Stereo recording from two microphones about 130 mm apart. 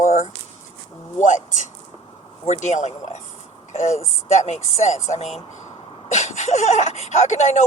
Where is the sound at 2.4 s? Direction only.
60° left (ahead or behind).